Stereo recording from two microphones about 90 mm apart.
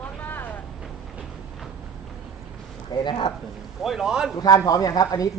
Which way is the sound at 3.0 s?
60° left (ahead or behind).